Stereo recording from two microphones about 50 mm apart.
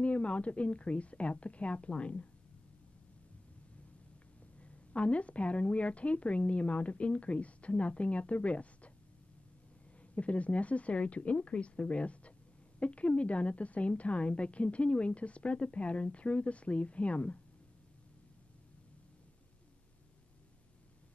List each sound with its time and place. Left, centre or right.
0.0 s speech: left
4.6 s speech: left
10.1 s speech: left